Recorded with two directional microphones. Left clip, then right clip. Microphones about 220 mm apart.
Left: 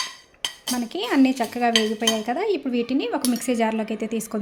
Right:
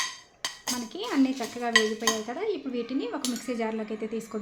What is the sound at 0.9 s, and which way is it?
A woman's voice, 35° left (ahead or behind).